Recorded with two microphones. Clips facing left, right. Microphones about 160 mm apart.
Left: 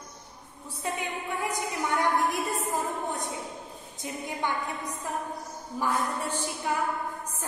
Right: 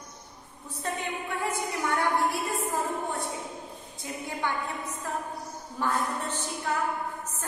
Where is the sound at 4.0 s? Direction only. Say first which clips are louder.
Left 1 dB; 15° left (ahead or behind).